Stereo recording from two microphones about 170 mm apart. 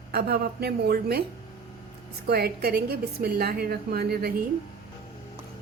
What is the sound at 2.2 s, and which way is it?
A woman's voice, 70° right (ahead or behind).